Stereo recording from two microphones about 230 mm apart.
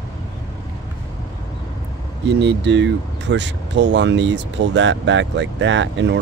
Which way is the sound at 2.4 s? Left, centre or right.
Right.